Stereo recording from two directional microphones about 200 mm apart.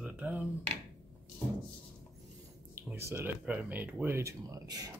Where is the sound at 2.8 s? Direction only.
10° right (ahead or behind).